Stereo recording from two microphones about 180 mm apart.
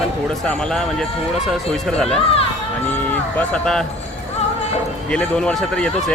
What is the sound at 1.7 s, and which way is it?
Speech, 5° left (ahead or behind).